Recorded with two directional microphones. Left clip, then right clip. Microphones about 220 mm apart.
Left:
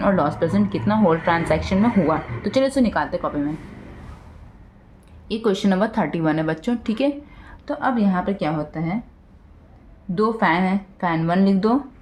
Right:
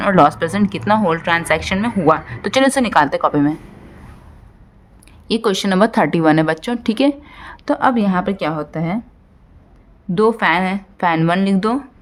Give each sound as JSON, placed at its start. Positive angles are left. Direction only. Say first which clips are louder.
{"t": 0.0, "sound": "a woman's voice", "louder": "right 7 dB", "side_deg": -40}
{"t": 5.3, "sound": "a woman's voice", "louder": "right 4 dB", "side_deg": -35}
{"t": 10.2, "sound": "a woman's voice", "louder": "right 5 dB", "side_deg": -45}